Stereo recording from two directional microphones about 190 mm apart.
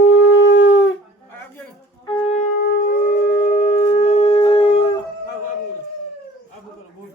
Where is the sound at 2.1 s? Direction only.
30° left (ahead or behind).